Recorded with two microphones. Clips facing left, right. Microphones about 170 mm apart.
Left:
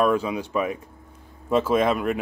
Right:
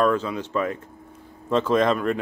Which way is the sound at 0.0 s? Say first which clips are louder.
Even; 10° left (ahead or behind).